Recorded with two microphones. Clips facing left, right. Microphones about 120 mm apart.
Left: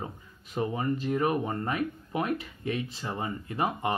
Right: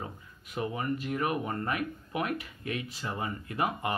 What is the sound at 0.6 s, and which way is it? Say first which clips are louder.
Speech: left 3 dB; 30° left (ahead or behind).